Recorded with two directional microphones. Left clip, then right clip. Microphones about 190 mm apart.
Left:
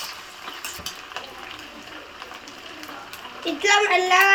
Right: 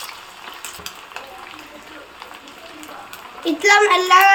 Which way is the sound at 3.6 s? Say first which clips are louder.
Right 5 dB; 60° right (ahead or behind).